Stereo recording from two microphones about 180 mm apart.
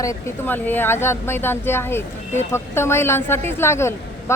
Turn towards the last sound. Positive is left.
turn(degrees=15)  # may be behind; listen again after turning